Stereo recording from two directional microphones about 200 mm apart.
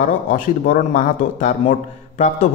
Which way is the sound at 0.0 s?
40° left (ahead or behind).